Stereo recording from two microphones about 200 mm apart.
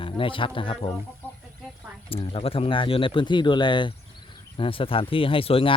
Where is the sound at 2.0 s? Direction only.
25° left (ahead or behind).